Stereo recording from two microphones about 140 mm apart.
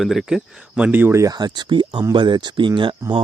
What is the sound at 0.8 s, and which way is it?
Speech, 15° right (ahead or behind).